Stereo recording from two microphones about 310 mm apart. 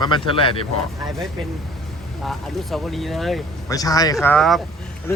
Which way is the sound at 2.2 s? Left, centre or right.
Centre.